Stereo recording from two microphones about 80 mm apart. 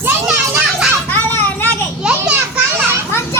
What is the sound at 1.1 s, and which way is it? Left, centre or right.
Vehicle, left.